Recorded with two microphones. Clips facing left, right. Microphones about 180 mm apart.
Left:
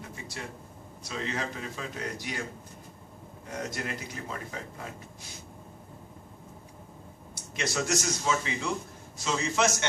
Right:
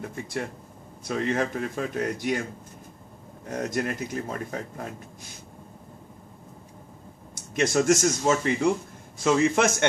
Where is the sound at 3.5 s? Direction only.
50° right (ahead or behind).